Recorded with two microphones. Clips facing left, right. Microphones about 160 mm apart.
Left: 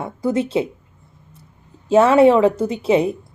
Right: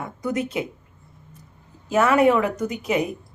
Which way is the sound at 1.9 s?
30° left (ahead or behind).